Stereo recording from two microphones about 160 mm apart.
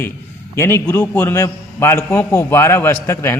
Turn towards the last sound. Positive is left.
turn(degrees=15)  # may be behind; listen again after turning